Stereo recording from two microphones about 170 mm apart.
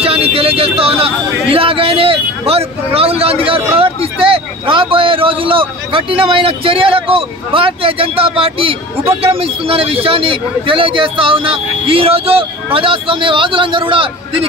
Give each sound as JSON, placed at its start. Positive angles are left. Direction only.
{"t": 0.0, "sound": "speech", "side_deg": -35}